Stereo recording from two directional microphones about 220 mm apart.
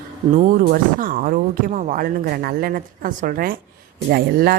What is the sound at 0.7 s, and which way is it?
Speech, 40° right (ahead or behind).